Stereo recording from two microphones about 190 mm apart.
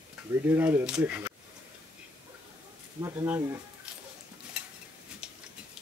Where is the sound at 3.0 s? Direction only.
15° right (ahead or behind).